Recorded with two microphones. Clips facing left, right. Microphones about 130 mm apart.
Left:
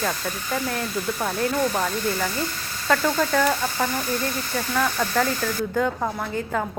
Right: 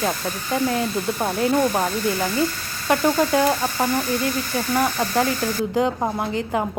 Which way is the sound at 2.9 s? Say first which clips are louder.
Right 3 dB; 15° right (ahead or behind).